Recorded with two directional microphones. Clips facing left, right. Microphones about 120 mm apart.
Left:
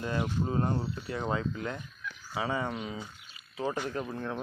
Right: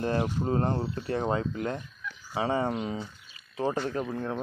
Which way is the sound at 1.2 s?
30° right (ahead or behind).